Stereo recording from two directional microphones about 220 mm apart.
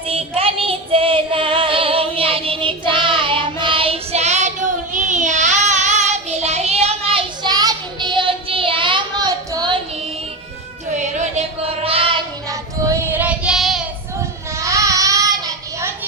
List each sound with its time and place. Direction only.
0.1 s child singing: 25° right (ahead or behind)
10.9 s child singing: 35° right (ahead or behind); by 13.8 s centre (ahead or behind)
14.5 s child singing: 15° right (ahead or behind)